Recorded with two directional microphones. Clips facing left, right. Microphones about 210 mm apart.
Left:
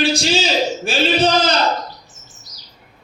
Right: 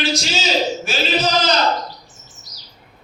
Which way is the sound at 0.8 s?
30° left (ahead or behind).